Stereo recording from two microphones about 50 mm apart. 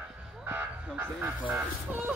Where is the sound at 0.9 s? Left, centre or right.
Right.